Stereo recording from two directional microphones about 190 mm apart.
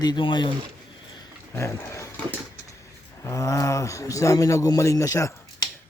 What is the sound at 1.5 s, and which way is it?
Speech, 15° left (ahead or behind).